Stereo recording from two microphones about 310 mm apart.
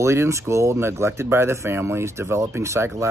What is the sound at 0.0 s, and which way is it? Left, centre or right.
Speech, centre.